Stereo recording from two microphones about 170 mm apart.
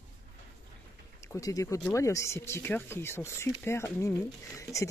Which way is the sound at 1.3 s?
20° left (ahead or behind).